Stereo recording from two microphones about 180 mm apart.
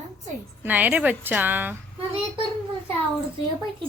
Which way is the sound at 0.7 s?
10° right (ahead or behind).